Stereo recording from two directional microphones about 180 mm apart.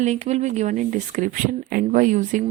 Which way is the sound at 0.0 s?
40° right (ahead or behind).